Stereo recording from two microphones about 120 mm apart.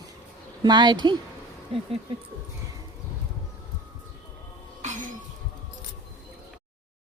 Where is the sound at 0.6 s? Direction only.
40° right (ahead or behind).